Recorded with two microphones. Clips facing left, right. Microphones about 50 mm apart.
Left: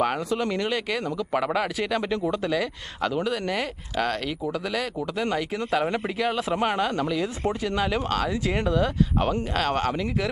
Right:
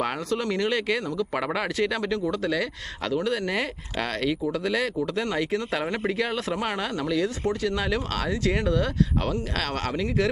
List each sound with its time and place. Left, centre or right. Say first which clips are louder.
0.0 s speech: left 2 dB; centre
2.0 s speech: left 1 dB; centre